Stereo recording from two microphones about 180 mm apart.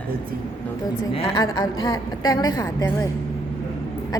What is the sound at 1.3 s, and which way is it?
A woman's voice, 20° left (ahead or behind).